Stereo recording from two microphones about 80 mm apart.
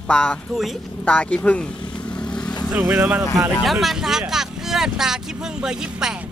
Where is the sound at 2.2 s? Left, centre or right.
Centre.